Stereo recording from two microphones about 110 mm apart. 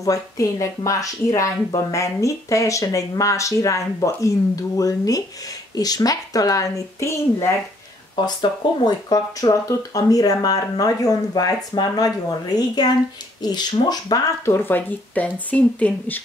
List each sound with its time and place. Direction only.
0.0 s speech: 30° left (ahead or behind)
8.3 s speech: 40° left (ahead or behind)
14.4 s speech: 20° left (ahead or behind)